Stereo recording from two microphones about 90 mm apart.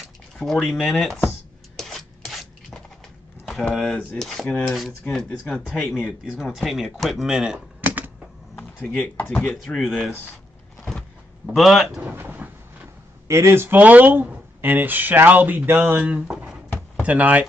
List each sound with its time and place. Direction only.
0.4 s speech: 5° left (ahead or behind)
1.8 s a sound: centre (ahead or behind)
3.6 s speech: 5° left (ahead or behind)
5.0 s speech: 10° left (ahead or behind)
6.4 s speech: centre (ahead or behind)
7.8 s typewriter: 20° right (ahead or behind)
8.5 s speech: 15° left (ahead or behind)
9.8 s speech: centre (ahead or behind)
11.5 s speech: centre (ahead or behind)
12.0 s a sound: 15° right (ahead or behind)
13.3 s speech: 30° right (ahead or behind)
16.0 s speech: 10° right (ahead or behind)